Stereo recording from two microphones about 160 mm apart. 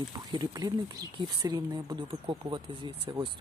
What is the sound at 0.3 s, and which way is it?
Speech, 25° right (ahead or behind).